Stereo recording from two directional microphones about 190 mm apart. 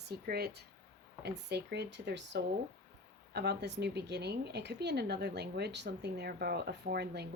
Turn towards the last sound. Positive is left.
turn(degrees=-60)  # may be behind; listen again after turning